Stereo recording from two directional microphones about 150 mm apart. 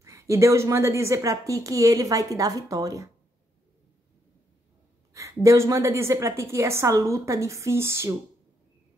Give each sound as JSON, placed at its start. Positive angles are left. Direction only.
{"t": 0.0, "sound": "a woman's voice", "side_deg": -20}
{"t": 5.1, "sound": "a woman's voice", "side_deg": -20}